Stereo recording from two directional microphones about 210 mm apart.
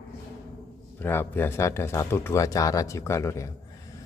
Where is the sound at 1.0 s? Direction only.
10° left (ahead or behind).